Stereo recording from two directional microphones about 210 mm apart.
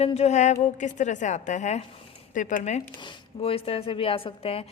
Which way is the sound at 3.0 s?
25° left (ahead or behind).